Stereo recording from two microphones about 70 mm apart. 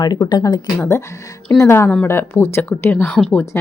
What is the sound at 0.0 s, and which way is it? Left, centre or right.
Speech, left.